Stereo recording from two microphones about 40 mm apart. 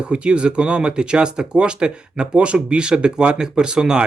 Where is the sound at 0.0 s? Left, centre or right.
Right.